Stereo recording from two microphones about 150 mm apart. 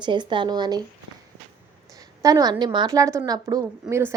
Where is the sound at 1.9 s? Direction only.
25° right (ahead or behind).